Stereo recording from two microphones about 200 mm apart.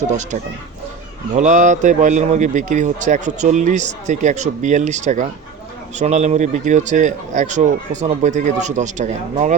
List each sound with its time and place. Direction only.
1.3 s a man's voice: 35° right (ahead or behind)